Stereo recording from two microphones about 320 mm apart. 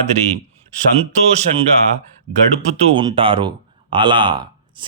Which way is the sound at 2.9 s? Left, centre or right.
Centre.